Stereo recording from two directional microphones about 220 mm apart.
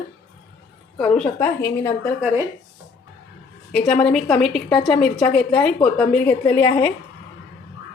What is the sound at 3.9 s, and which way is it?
A woman's voice, 5° left (ahead or behind).